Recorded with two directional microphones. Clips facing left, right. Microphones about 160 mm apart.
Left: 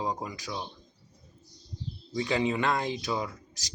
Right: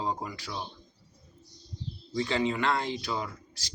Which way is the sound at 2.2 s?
15° left (ahead or behind).